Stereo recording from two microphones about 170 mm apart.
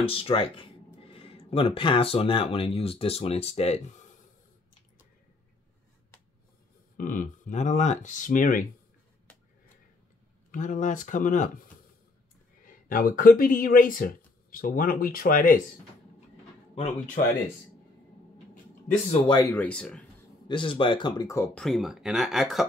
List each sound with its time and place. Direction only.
0.0 s speech: 30° left (ahead or behind)
7.0 s speech: 55° left (ahead or behind)
10.5 s speech: 50° left (ahead or behind)
16.7 s speech: 45° left (ahead or behind)
19.4 s speech: 10° left (ahead or behind)
20.4 s speech: 30° left (ahead or behind)
21.5 s speech: centre (ahead or behind)